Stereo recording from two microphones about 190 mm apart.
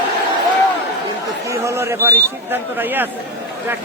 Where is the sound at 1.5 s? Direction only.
15° right (ahead or behind).